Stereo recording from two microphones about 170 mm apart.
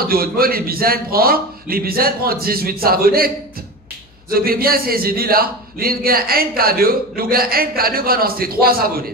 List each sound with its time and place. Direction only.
0.0 s a man's voice: 60° right (ahead or behind)
4.3 s a man's voice: 60° right (ahead or behind)